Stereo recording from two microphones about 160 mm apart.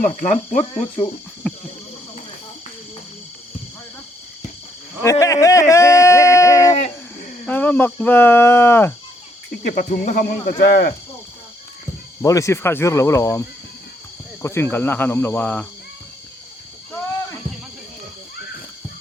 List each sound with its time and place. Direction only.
0.0 s speech: 50° left (ahead or behind)
1.4 s a sound: centre (ahead or behind)
5.2 s speech: 20° left (ahead or behind)
6.7 s a sound: 50° left (ahead or behind)
7.4 s speech: 10° left (ahead or behind)
9.5 s speech: 55° left (ahead or behind); by 10.9 s 85° left
12.2 s speech: 20° left (ahead or behind)
14.4 s speech: 15° left (ahead or behind)